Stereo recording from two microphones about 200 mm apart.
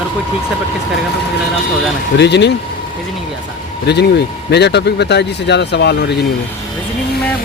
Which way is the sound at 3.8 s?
55° left (ahead or behind).